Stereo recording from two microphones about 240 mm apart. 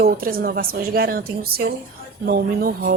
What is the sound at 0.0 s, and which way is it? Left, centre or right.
A woman's voice, right.